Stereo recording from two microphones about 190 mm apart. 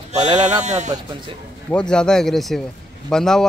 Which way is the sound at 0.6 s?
40° right (ahead or behind).